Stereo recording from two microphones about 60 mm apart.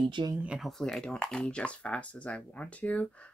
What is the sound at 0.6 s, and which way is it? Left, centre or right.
Speech, centre.